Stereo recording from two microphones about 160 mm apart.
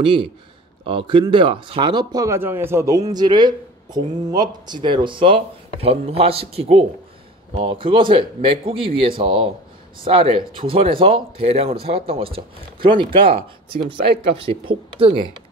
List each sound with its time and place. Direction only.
0.0 s speech: 35° right (ahead or behind)